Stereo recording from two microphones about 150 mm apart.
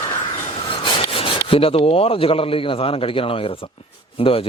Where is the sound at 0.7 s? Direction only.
35° left (ahead or behind).